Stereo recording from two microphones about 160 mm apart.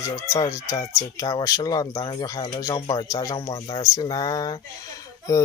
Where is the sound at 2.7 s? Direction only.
35° left (ahead or behind).